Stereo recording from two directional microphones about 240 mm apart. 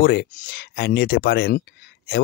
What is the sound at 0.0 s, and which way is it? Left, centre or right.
Speech, left.